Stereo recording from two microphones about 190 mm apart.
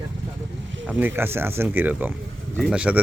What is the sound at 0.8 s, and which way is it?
Speech, 10° right (ahead or behind).